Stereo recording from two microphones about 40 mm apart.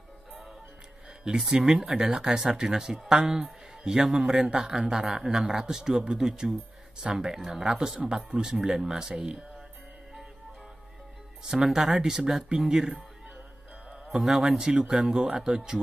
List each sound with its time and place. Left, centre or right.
1.2 s speech: right
3.4 s music: right
4.0 s speech: centre
7.3 s speech: centre
11.4 s speech: centre
14.1 s speech: centre